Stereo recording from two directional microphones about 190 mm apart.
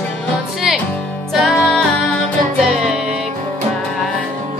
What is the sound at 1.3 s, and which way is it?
Music, centre (ahead or behind).